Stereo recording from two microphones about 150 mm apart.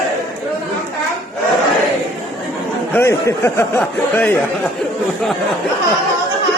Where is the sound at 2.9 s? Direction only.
15° left (ahead or behind).